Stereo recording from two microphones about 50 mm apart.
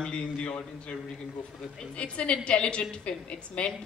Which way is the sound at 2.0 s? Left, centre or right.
Left.